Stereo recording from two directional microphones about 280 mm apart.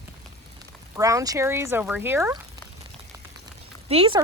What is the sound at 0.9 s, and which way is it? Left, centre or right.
Speech, centre.